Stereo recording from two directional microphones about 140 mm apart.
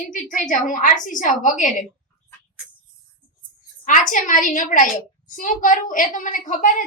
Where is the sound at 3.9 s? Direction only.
70° left (ahead or behind).